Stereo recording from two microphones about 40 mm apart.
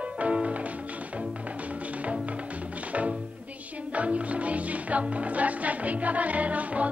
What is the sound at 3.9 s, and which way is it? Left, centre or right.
Music, right.